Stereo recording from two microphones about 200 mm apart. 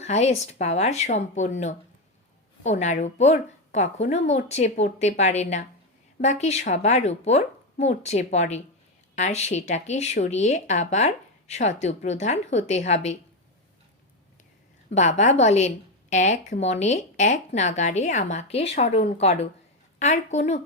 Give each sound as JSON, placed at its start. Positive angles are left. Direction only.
{"t": 0.0, "sound": "a woman's voice", "side_deg": 35}
{"t": 14.9, "sound": "a woman's voice", "side_deg": 35}